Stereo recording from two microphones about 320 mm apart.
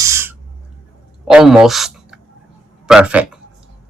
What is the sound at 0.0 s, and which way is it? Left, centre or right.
Owl, centre.